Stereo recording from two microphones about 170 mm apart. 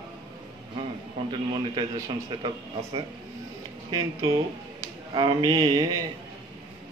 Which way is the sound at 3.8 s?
25° right (ahead or behind).